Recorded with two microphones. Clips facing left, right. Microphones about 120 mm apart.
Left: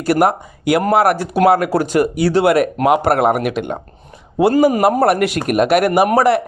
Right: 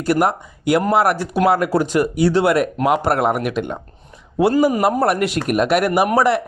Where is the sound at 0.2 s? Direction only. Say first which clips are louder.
Left 3 dB; 5° left (ahead or behind).